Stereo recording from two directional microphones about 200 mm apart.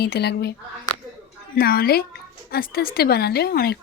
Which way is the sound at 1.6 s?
50° left (ahead or behind).